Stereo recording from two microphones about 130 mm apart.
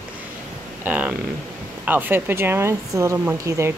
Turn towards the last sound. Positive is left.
turn(degrees=-20)  # may be behind; listen again after turning